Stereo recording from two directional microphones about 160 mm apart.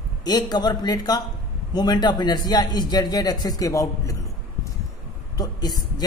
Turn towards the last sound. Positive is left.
turn(degrees=25)  # may be behind; listen again after turning